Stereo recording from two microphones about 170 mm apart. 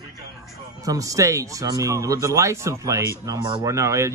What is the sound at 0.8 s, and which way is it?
Speech, 20° right (ahead or behind).